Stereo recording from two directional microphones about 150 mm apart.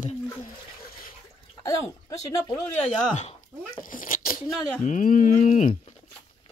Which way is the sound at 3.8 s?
65° left (ahead or behind).